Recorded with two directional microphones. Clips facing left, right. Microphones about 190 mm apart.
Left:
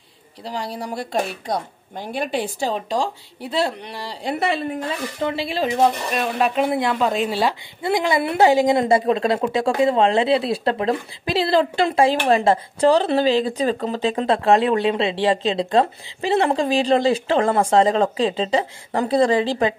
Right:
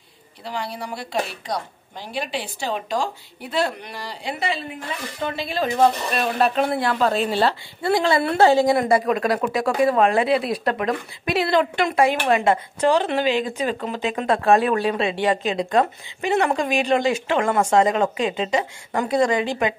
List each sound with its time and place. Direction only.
0.5 s a woman's voice: 40° left (ahead or behind)
2.7 s a woman's voice: 30° left (ahead or behind)
4.2 s a woman's voice: 50° left (ahead or behind)
5.2 s a woman's voice: 30° left (ahead or behind)